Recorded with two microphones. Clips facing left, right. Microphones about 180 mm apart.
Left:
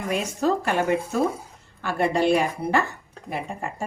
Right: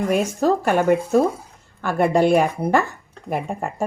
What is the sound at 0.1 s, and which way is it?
A woman's voice, 50° right (ahead or behind).